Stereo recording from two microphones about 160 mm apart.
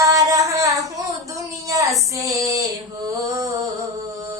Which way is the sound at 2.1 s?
20° right (ahead or behind).